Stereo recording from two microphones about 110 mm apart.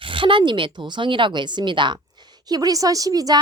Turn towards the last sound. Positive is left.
turn(degrees=-35)  # may be behind; listen again after turning